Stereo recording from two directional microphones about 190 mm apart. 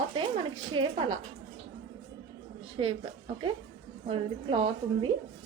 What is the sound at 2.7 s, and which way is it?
A woman's voice, 30° right (ahead or behind).